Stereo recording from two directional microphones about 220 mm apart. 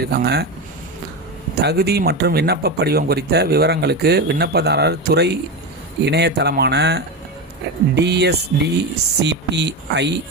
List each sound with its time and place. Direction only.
0.0 s speech: 45° right (ahead or behind)
1.5 s speech: 45° right (ahead or behind)